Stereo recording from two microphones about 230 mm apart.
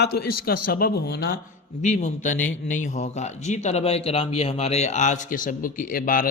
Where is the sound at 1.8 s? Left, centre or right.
Left.